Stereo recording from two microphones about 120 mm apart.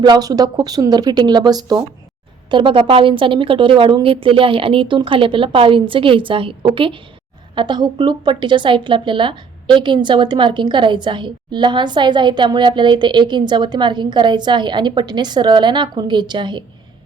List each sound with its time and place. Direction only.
0.0 s a woman's voice: 35° right (ahead or behind)